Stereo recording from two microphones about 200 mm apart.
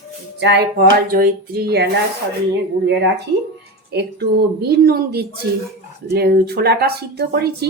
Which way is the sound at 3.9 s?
50° right (ahead or behind).